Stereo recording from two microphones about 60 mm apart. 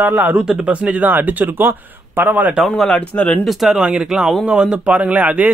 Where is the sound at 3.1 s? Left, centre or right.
Left.